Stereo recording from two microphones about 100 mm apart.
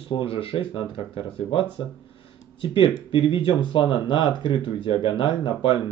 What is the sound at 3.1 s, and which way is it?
Speech, 60° left (ahead or behind).